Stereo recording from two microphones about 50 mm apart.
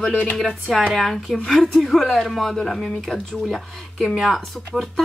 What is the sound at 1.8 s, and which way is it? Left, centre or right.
Speech, centre.